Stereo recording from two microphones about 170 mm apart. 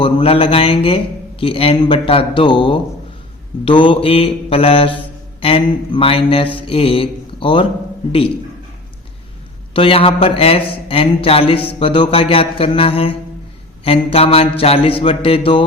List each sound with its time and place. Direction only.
0.0 s speech: 35° left (ahead or behind)
9.7 s speech: 30° left (ahead or behind)